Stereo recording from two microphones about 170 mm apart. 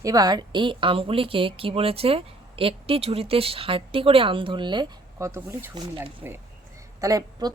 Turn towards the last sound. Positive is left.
turn(degrees=-20)  # may be behind; listen again after turning